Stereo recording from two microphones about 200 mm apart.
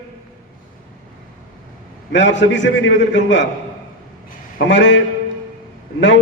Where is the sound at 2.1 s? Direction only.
65° left (ahead or behind).